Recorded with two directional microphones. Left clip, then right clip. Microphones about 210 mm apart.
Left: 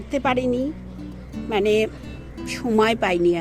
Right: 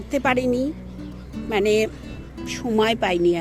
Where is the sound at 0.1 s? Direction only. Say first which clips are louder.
Right 1 dB; centre (ahead or behind).